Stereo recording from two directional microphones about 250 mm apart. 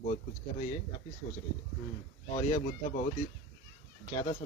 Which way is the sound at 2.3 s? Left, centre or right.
Left.